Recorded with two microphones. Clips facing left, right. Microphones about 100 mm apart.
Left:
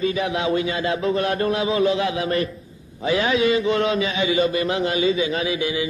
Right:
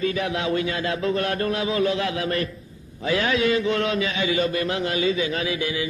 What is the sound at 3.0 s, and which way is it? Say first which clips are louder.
Mantra: left 2 dB; 20° left (ahead or behind).